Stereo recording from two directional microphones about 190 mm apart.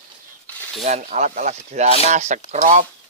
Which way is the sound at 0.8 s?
40° right (ahead or behind).